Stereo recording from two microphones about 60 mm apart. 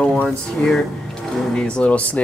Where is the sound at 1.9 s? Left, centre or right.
Left.